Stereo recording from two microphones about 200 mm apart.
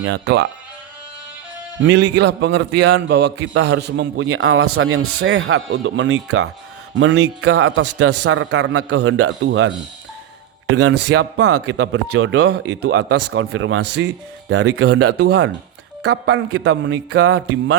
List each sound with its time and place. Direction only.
0.0 s a man's voice: 60° right (ahead or behind)
1.8 s a man's voice: 60° right (ahead or behind)
10.8 s a man's voice: 70° right (ahead or behind)
16.0 s a man's voice: 60° right (ahead or behind)